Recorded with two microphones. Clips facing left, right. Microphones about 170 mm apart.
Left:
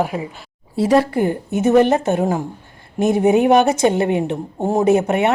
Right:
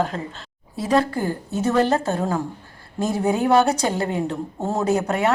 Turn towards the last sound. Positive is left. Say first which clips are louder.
# left 5 dB
turn(degrees=20)  # may be behind; listen again after turning